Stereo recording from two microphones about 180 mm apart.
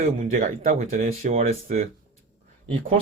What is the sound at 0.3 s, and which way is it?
Speech, 45° right (ahead or behind).